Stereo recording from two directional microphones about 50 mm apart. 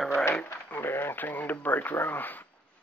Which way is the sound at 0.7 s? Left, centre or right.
Left.